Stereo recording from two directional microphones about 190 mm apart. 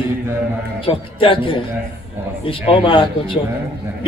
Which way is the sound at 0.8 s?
25° left (ahead or behind).